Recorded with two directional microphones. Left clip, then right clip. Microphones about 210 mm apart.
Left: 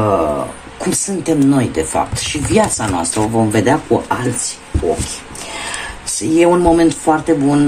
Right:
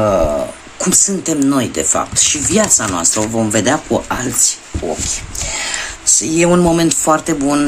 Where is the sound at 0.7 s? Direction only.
25° right (ahead or behind).